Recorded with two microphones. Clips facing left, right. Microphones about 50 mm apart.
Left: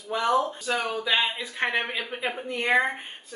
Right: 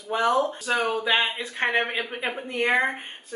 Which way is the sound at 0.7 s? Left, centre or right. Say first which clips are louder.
Right 3 dB; right.